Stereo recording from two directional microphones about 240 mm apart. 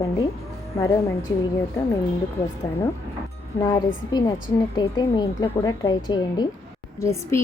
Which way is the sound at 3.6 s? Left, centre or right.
Centre.